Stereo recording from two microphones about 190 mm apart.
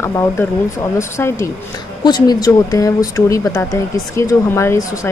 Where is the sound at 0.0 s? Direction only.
15° left (ahead or behind).